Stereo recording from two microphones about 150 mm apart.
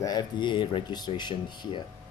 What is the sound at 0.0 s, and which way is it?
Speech, 25° left (ahead or behind).